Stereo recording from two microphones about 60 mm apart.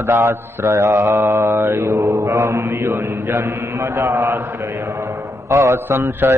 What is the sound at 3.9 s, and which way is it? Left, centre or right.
Mantra, right.